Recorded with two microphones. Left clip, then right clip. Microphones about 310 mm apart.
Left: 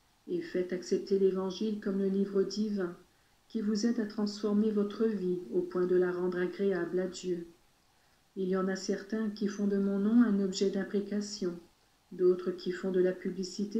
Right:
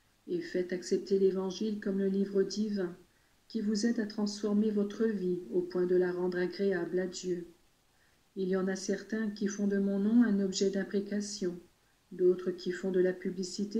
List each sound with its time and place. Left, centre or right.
0.3 s speech: centre
8.4 s speech: centre